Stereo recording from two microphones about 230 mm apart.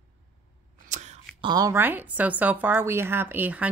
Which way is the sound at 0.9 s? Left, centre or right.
Right.